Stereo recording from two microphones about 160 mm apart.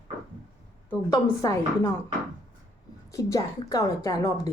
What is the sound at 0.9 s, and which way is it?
A woman's voice, 20° left (ahead or behind).